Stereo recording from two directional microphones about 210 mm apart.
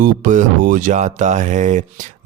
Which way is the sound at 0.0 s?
40° right (ahead or behind).